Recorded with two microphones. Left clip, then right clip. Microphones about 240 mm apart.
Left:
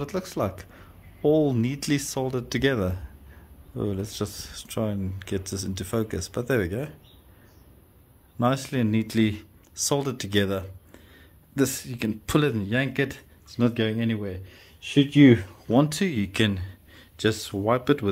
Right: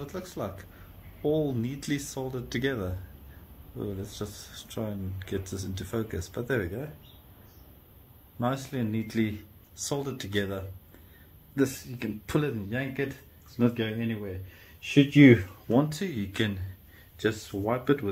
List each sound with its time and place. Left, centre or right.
0.0 s speech: left
8.4 s speech: left
14.8 s speech: left
15.7 s speech: left